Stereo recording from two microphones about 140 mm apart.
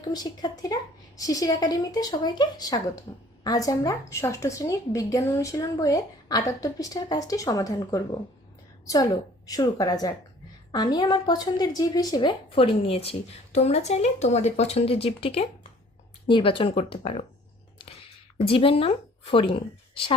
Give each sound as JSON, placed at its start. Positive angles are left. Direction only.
{"t": 0.0, "sound": "a woman's voice", "side_deg": 30}
{"t": 9.5, "sound": "a woman's voice", "side_deg": 25}
{"t": 18.3, "sound": "a woman's voice", "side_deg": 40}